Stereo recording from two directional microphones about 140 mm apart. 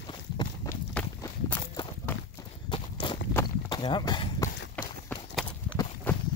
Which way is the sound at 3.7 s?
35° left (ahead or behind).